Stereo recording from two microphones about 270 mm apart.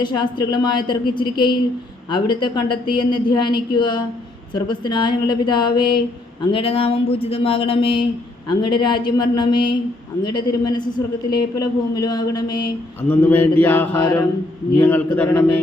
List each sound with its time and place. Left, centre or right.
0.0 s a woman's voice: centre